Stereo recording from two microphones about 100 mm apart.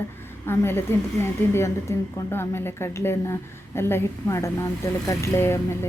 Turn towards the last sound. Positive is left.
turn(degrees=25)  # may be behind; listen again after turning